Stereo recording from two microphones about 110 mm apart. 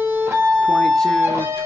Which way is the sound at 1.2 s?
20° right (ahead or behind).